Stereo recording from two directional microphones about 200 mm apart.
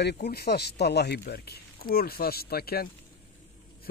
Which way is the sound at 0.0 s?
55° left (ahead or behind).